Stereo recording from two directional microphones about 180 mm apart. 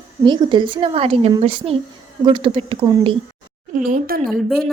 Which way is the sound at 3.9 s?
50° right (ahead or behind).